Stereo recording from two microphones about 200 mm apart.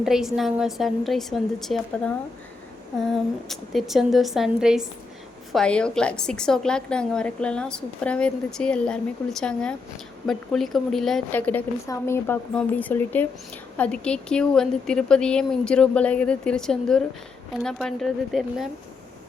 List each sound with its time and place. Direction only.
0.0 s a woman's voice: centre (ahead or behind)